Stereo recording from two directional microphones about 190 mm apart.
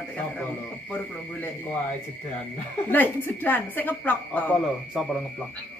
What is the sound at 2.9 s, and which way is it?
A woman's voice, 10° left (ahead or behind).